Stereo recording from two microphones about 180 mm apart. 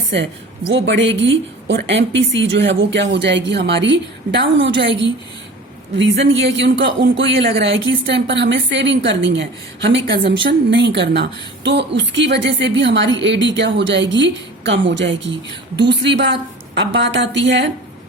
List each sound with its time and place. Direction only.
0.7 s a woman's voice: 90° right
6.0 s a woman's voice: 85° right